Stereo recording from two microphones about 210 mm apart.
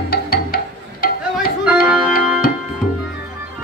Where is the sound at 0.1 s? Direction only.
45° left (ahead or behind).